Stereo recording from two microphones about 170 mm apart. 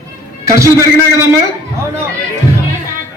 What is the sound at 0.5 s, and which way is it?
Speech, 20° right (ahead or behind).